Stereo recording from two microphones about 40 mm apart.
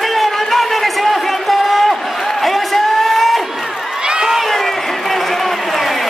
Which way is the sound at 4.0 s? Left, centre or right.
Centre.